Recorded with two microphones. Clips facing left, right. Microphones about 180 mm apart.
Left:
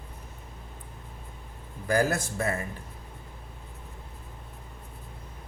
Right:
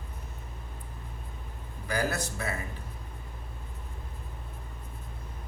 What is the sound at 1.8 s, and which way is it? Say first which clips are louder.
Speech: left 5 dB; 50° left (ahead or behind).